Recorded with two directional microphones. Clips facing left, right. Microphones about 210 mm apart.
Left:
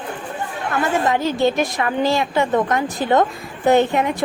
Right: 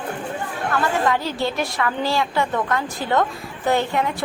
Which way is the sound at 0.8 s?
20° left (ahead or behind).